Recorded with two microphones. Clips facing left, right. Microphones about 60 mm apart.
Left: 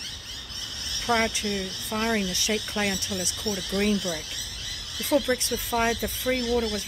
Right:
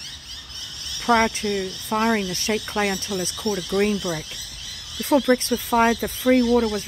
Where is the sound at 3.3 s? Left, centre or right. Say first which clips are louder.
Right 7 dB; centre.